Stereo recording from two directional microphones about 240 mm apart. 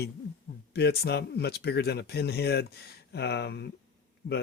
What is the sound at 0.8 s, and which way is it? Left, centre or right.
Speech, left.